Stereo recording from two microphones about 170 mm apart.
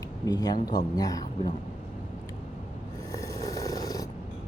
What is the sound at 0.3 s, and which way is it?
Speech, 25° left (ahead or behind).